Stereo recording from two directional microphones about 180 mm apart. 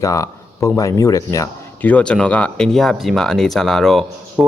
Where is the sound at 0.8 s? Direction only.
20° left (ahead or behind).